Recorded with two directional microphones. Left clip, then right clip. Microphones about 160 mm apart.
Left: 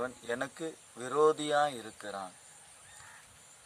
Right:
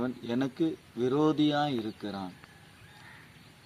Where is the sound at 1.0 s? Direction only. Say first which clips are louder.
Right 1 dB; 15° left (ahead or behind).